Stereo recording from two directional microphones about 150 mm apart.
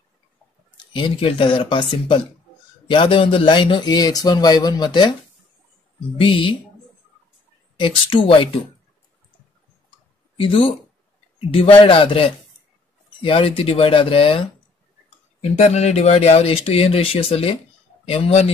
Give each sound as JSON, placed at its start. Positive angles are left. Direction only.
{"t": 0.9, "sound": "speech", "side_deg": 35}
{"t": 6.1, "sound": "speech", "side_deg": 35}
{"t": 7.8, "sound": "speech", "side_deg": 35}
{"t": 10.3, "sound": "speech", "side_deg": 35}
{"t": 15.5, "sound": "speech", "side_deg": 50}